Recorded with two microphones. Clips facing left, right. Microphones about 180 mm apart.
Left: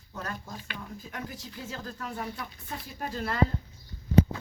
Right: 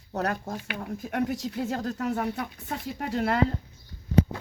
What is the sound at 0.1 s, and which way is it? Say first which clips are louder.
Speech: right 9 dB; 70° right (ahead or behind).